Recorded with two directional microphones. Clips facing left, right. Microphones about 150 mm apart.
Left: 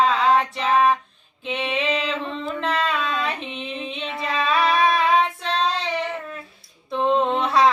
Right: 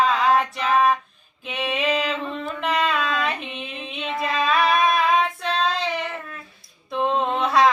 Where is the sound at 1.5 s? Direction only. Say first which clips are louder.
Even; 5° right (ahead or behind).